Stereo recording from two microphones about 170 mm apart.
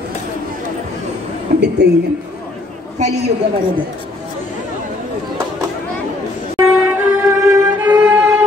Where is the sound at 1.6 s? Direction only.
80° right.